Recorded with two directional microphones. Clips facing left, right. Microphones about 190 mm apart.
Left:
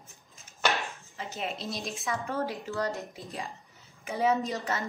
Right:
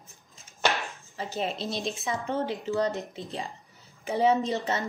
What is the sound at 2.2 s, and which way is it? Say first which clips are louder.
A woman's voice: right 3 dB; 20° right (ahead or behind).